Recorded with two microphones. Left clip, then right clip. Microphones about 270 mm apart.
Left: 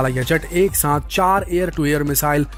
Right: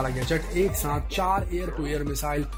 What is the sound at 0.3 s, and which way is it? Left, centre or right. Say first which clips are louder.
Speech: left 7 dB; left.